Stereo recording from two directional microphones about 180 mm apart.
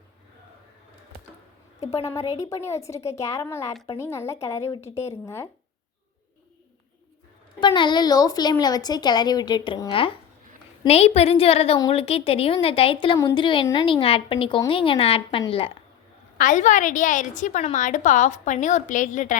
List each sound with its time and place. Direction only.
2.5 s a woman's voice: 15° left (ahead or behind)
7.6 s a woman's voice: 25° left (ahead or behind)
16.4 s a woman's voice: 45° left (ahead or behind)